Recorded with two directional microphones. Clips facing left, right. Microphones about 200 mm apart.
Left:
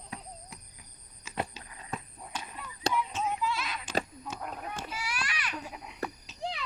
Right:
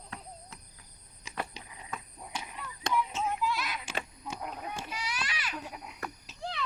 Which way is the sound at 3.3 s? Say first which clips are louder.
Even; centre (ahead or behind).